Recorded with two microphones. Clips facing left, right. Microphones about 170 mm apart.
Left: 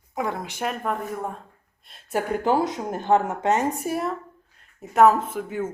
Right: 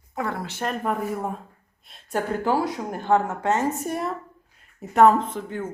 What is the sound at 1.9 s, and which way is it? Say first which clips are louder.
Speech: left 1 dB; 10° left (ahead or behind).